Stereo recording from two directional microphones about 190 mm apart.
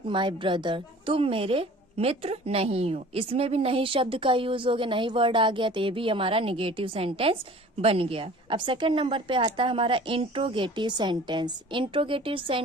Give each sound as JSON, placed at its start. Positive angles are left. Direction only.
{"t": 0.1, "sound": "a woman's voice", "side_deg": -25}